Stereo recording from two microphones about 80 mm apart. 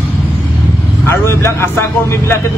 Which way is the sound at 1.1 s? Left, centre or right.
Left.